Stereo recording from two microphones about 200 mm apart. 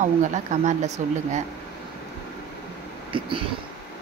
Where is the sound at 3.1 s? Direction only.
25° right (ahead or behind).